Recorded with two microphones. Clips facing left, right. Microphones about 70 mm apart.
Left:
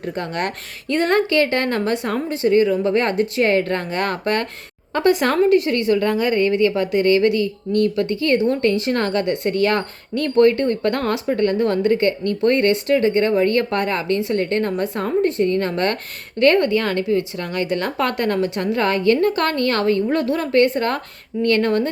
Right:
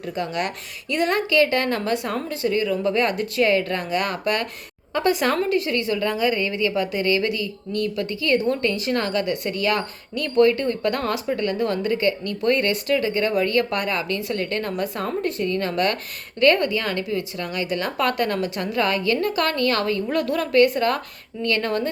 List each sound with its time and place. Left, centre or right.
0.0 s a woman's voice: left